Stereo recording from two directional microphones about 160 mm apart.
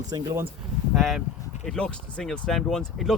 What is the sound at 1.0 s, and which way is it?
Speech, centre (ahead or behind).